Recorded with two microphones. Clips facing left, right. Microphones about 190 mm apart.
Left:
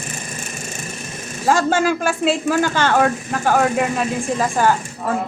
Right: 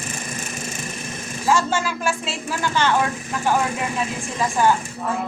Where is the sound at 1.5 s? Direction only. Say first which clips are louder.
Left 4 dB; 50° left (ahead or behind).